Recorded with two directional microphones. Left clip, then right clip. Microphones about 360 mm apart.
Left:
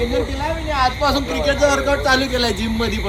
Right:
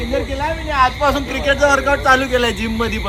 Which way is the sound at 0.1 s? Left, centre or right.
Centre.